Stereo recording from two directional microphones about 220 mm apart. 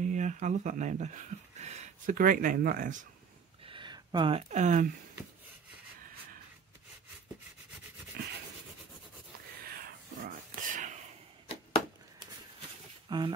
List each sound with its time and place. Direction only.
0.0 s speech: 35° right (ahead or behind)
3.6 s a sound: 20° right (ahead or behind)
4.5 s speech: 35° right (ahead or behind)
9.7 s whispering: 40° right (ahead or behind)
13.1 s speech: 20° right (ahead or behind)